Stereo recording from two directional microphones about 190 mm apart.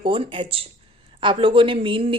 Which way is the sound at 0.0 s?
25° right (ahead or behind).